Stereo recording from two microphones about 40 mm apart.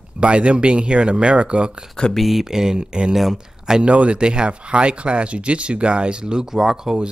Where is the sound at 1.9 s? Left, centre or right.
Centre.